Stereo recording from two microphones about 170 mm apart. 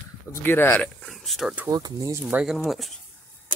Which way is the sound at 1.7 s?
20° right (ahead or behind).